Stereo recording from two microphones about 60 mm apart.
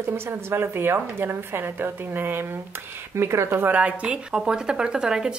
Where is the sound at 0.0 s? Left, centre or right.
Right.